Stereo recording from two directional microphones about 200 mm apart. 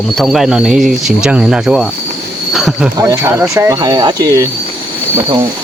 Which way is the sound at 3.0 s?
15° right (ahead or behind).